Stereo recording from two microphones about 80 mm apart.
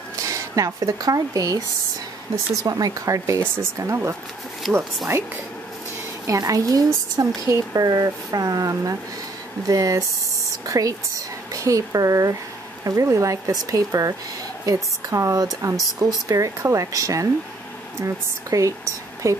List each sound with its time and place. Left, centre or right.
0.2 s speech: right
2.6 s a woman's voice: right
4.6 s speech: centre
6.2 s a woman's voice: right